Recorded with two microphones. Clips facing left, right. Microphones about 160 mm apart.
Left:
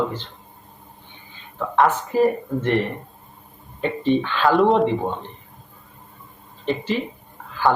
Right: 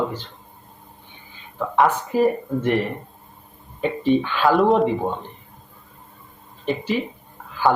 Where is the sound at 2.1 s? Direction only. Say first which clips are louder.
Even; 10° right (ahead or behind).